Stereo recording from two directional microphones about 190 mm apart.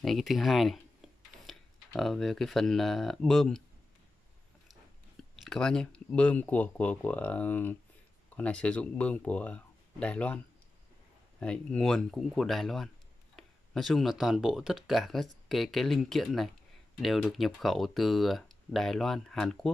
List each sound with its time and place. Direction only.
0.0 s speech: centre (ahead or behind)
1.5 s tick-tock: centre (ahead or behind)
2.0 s speech: centre (ahead or behind)
5.3 s speech: centre (ahead or behind)